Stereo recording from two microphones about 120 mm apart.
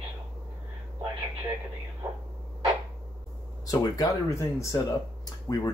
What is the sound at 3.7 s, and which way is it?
Speech, 30° left (ahead or behind).